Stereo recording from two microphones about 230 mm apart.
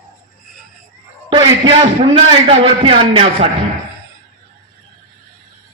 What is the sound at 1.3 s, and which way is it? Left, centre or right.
A man's voice, centre.